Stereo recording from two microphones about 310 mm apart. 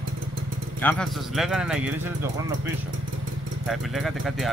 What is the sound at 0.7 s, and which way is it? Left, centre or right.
Speech, centre.